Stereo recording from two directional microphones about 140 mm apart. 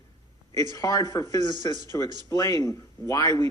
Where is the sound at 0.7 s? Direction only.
25° left (ahead or behind).